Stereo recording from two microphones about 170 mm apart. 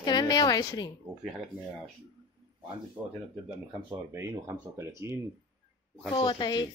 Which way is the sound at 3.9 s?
15° right (ahead or behind).